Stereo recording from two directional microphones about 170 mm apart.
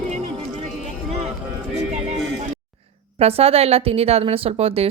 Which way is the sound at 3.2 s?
35° right (ahead or behind).